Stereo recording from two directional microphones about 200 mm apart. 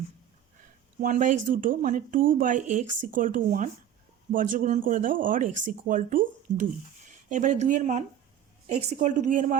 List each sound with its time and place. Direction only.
1.0 s speech: 40° right (ahead or behind)